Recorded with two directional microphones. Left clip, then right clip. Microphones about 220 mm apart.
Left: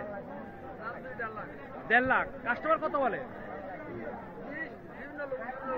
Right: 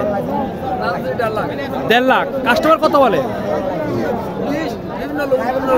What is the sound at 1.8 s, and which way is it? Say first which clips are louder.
Speech: right 13 dB; 10° right (ahead or behind).